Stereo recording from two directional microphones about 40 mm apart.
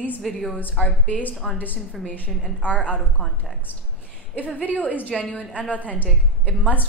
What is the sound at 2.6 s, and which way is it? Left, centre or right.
Speech, left.